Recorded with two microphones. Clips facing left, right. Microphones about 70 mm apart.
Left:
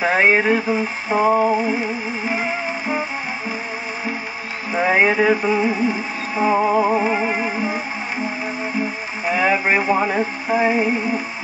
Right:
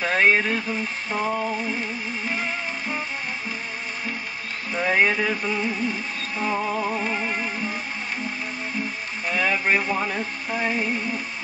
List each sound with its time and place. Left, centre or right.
0.0 s music: left
1.2 s a sound: left
1.7 s music: centre
4.7 s music: left
5.4 s music: centre
6.4 s music: left
7.3 s music: centre
9.4 s a sound: left
9.9 s music: left
10.5 s music: centre